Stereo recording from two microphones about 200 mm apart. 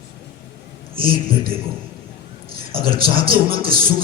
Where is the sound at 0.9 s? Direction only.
45° right (ahead or behind).